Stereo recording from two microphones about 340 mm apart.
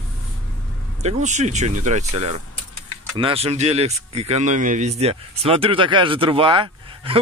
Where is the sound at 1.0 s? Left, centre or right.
Right.